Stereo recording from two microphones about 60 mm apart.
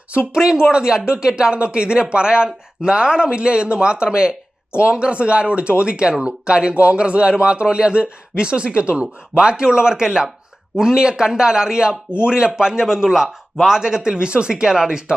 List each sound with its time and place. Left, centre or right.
0.3 s speech: centre